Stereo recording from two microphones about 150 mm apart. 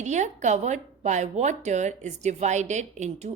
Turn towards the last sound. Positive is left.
turn(degrees=-50)  # may be behind; listen again after turning